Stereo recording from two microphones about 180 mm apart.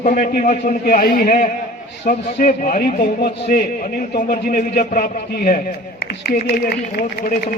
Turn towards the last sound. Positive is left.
turn(degrees=50)  # may be behind; listen again after turning